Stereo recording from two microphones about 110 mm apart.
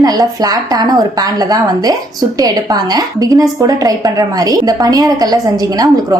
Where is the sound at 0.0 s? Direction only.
35° right (ahead or behind).